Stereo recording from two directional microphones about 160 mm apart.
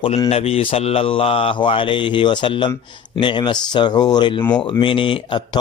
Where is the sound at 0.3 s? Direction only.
40° left (ahead or behind).